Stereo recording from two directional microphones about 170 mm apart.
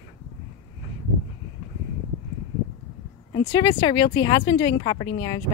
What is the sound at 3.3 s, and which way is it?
Speech, 25° left (ahead or behind).